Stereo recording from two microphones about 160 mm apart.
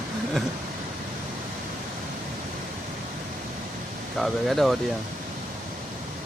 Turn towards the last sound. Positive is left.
turn(degrees=0)  # may be behind; listen again after turning